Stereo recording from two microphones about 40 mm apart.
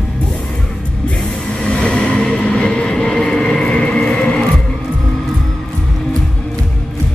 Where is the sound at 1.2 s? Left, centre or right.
Left.